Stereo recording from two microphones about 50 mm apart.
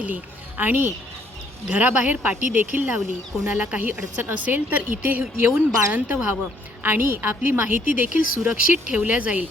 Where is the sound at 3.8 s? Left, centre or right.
Right.